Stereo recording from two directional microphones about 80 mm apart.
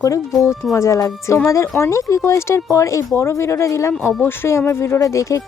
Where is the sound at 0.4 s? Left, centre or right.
Left.